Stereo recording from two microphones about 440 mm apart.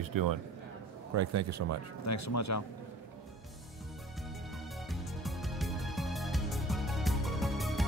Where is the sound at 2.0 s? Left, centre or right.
Left.